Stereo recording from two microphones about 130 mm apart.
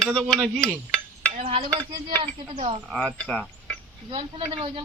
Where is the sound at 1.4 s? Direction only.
55° right (ahead or behind).